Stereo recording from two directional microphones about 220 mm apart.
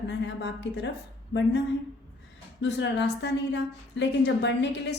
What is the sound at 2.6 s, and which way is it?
A woman's voice, 55° left (ahead or behind).